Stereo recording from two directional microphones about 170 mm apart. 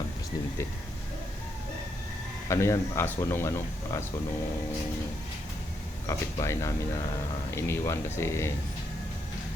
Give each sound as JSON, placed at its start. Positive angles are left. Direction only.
{"t": 2.5, "sound": "speech", "side_deg": 15}
{"t": 6.1, "sound": "speech", "side_deg": 15}